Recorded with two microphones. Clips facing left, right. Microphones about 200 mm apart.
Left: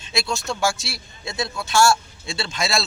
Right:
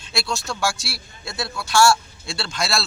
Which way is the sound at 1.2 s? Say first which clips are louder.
Left 2 dB; 20° left (ahead or behind).